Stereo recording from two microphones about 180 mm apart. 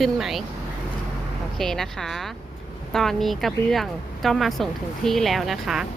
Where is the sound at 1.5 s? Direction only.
Centre (ahead or behind).